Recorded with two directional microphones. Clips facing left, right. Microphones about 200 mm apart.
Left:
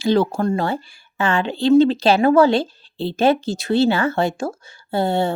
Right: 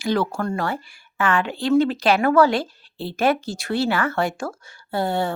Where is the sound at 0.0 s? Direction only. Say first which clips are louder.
Left 5 dB; 25° left (ahead or behind).